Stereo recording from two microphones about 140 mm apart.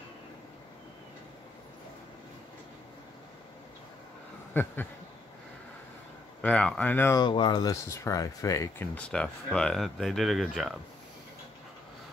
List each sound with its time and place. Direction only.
4.6 s speech: 15° left (ahead or behind)
6.4 s speech: 10° left (ahead or behind)
7.2 s speech: 35° left (ahead or behind)
8.9 s speech: 5° left (ahead or behind)